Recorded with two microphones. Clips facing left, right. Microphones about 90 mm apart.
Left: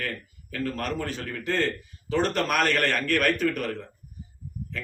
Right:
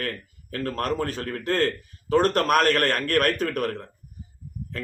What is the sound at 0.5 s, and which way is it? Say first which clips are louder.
A man's voice: right 3 dB; 45° right (ahead or behind).